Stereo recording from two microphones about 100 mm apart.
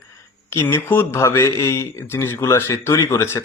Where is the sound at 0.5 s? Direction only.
25° left (ahead or behind).